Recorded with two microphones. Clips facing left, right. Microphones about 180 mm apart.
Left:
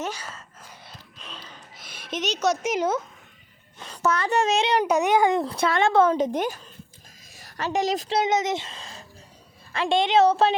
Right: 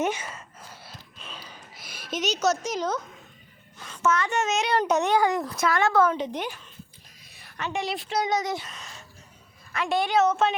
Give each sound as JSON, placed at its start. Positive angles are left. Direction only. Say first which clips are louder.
{"t": 0.0, "sound": "speech", "louder": "right 5 dB", "side_deg": -20}
{"t": 0.9, "sound": "a sound", "louder": "even", "side_deg": -5}
{"t": 2.6, "sound": "a child's voice", "louder": "left 4 dB", "side_deg": 10}
{"t": 3.8, "sound": "a child's voice", "louder": "left 1 dB", "side_deg": 35}
{"t": 4.7, "sound": "a child's voice", "louder": "left 2 dB", "side_deg": 10}
{"t": 5.1, "sound": "speech", "louder": "left 3 dB", "side_deg": 25}
{"t": 6.1, "sound": "a woman's voice", "louder": "left 6 dB", "side_deg": 45}
{"t": 8.2, "sound": "a child's voice", "louder": "left 1 dB", "side_deg": 20}